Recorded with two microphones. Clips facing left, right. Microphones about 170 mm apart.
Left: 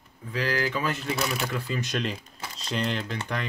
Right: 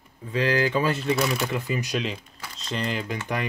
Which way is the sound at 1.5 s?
15° right (ahead or behind).